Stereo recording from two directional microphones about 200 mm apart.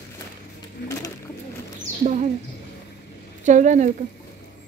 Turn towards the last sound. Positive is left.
turn(degrees=-35)  # may be behind; listen again after turning